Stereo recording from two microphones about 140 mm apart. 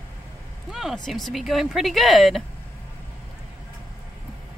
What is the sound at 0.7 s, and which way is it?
Speech, centre (ahead or behind).